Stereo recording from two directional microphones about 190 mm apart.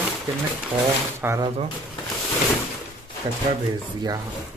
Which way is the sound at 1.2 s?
15° right (ahead or behind).